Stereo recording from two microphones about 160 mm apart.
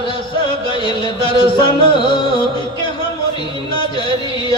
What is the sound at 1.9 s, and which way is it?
Music, 30° left (ahead or behind).